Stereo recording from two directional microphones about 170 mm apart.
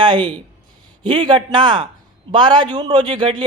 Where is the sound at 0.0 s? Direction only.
25° right (ahead or behind).